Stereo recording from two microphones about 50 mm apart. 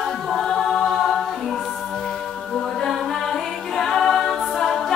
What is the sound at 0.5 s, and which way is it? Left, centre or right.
A capella, centre.